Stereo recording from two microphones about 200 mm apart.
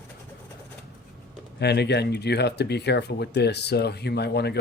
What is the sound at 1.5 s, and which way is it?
Speech, 55° left (ahead or behind).